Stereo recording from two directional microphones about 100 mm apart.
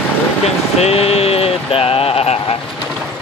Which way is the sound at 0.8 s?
85° left.